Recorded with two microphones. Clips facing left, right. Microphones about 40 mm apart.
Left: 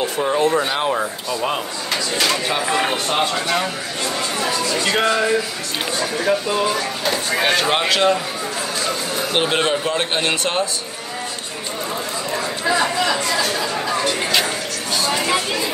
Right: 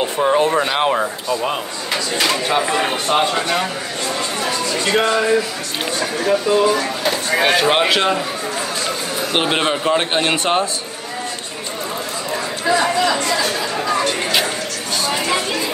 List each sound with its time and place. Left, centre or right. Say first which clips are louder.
0.0 s speech: right 2 dB; right
1.3 s speech: even; centre; by 10.6 s right
12.3 s chatter: right 2 dB; centre